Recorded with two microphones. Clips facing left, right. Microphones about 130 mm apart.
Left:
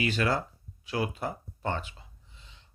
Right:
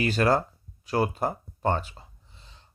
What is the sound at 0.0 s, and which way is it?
Speech, 40° right (ahead or behind).